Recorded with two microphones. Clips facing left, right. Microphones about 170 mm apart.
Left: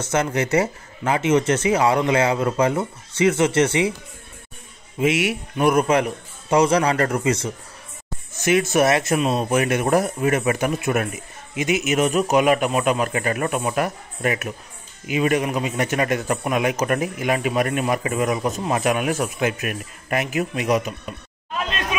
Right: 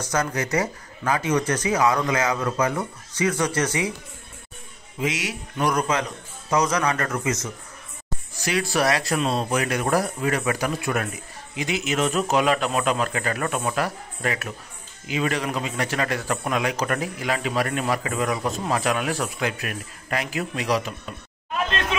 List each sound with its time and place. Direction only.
0.0 s speech: 25° left (ahead or behind)
5.0 s speech: 25° left (ahead or behind)
9.2 s speech: 10° left (ahead or behind)
9.5 s speech: 20° left (ahead or behind)